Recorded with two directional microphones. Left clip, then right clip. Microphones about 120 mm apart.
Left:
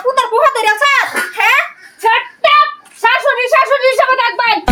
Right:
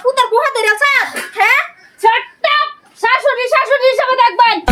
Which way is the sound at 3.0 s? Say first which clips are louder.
Left 1 dB; 15° right (ahead or behind).